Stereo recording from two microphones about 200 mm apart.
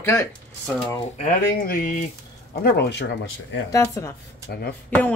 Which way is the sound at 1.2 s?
45° left (ahead or behind).